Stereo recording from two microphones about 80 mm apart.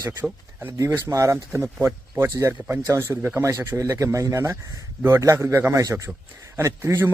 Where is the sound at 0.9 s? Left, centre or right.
Right.